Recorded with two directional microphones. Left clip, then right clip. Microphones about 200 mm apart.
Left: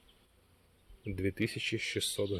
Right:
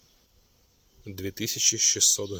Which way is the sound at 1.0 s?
5° left (ahead or behind).